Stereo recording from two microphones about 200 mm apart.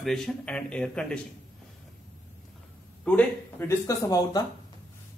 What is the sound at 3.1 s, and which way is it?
A man's voice, 5° left (ahead or behind).